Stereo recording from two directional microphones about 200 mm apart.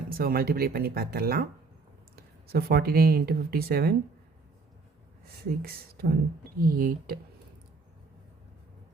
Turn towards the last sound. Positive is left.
turn(degrees=-45)  # may be behind; listen again after turning